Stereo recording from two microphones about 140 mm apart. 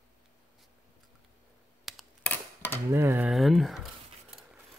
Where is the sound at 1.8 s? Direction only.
Centre (ahead or behind).